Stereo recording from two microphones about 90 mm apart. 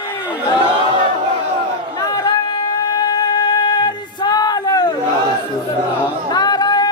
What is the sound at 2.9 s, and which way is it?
Music, 50° left (ahead or behind).